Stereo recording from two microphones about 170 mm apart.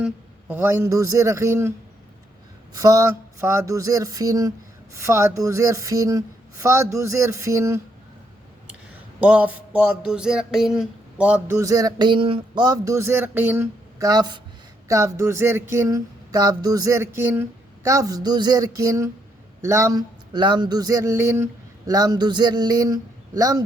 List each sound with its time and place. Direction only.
0.0 s speech: 10° right (ahead or behind)
2.7 s speech: 20° right (ahead or behind)
9.2 s speech: 5° right (ahead or behind)
11.4 s speech: 20° right (ahead or behind)
14.0 s speech: 25° right (ahead or behind)